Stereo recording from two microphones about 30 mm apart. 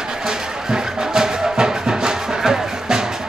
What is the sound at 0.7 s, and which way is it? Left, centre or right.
Music, right.